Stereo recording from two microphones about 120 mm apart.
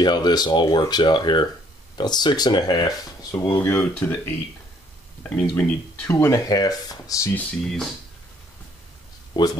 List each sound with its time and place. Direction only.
0.0 s speech: 35° left (ahead or behind)
3.5 s speech: 15° left (ahead or behind)
7.3 s speech: 5° left (ahead or behind)
9.3 s speech: 35° left (ahead or behind)